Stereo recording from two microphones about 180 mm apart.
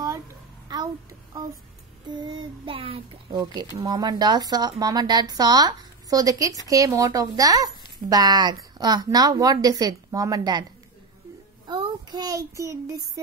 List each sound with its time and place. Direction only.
0.7 s child singing: 25° right (ahead or behind)
2.0 s speech: 25° right (ahead or behind)
11.6 s a child's voice: 25° right (ahead or behind)